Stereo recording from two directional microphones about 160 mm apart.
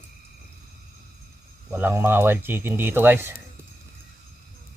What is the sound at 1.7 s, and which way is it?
Speech, 15° right (ahead or behind).